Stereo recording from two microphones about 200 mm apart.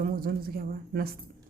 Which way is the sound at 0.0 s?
45° right (ahead or behind).